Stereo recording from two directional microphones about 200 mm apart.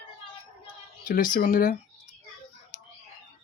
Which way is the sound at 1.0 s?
45° left (ahead or behind).